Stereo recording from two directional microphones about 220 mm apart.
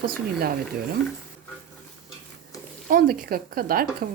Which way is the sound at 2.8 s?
40° right (ahead or behind).